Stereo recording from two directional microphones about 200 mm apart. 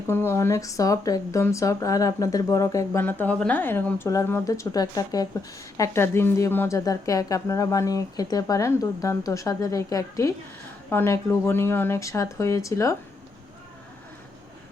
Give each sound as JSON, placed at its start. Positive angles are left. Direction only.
{"t": 0.1, "sound": "speech", "side_deg": 10}